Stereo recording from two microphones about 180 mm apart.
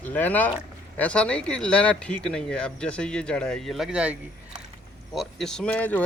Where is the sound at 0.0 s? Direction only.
10° left (ahead or behind).